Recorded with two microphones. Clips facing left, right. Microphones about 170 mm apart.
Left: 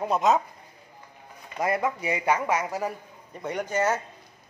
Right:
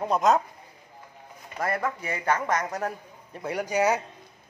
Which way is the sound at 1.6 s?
15° left (ahead or behind).